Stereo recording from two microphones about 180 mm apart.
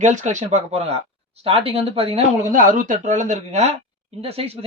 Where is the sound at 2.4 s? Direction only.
45° right (ahead or behind).